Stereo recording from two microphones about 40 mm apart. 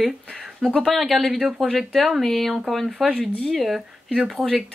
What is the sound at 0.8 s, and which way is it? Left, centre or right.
Speech, centre.